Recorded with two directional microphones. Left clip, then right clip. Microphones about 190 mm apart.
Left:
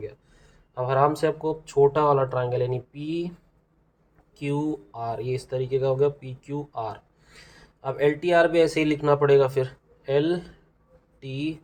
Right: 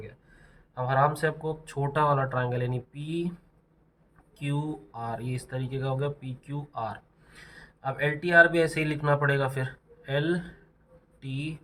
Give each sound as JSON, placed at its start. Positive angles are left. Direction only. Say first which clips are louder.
{"t": 0.7, "sound": "speech", "louder": "left 3 dB", "side_deg": 25}
{"t": 4.4, "sound": "speech", "louder": "left 7 dB", "side_deg": 20}